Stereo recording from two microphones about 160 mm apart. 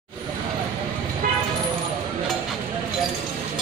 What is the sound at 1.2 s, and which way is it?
Vehicle, 60° right (ahead or behind).